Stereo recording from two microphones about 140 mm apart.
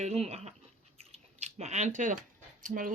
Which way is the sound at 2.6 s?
75° right (ahead or behind).